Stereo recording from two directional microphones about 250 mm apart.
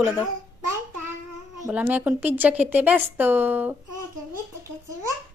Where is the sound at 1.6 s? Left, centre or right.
Centre.